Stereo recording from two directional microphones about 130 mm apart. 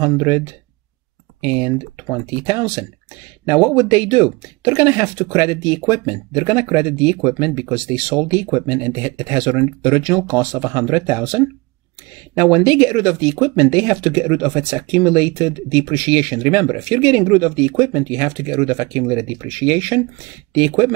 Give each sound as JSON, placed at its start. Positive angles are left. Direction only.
{"t": 0.0, "sound": "speech", "side_deg": -25}
{"t": 1.5, "sound": "speech", "side_deg": -20}
{"t": 4.8, "sound": "speech", "side_deg": -20}